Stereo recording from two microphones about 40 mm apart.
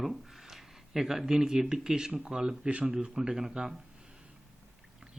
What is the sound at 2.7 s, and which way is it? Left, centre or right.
Speech, right.